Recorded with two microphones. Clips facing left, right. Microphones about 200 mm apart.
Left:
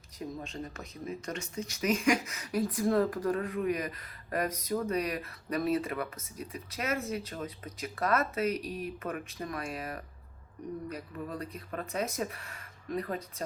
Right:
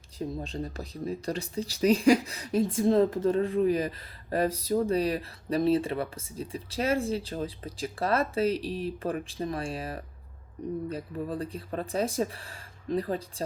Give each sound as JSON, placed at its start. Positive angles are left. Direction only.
{"t": 0.2, "sound": "speech", "side_deg": -30}